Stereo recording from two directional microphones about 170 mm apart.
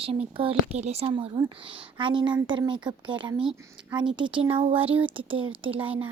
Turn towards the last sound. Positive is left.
turn(degrees=-30)  # may be behind; listen again after turning